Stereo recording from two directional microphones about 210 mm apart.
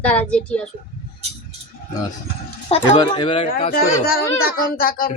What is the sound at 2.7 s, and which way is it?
Speech, 25° left (ahead or behind).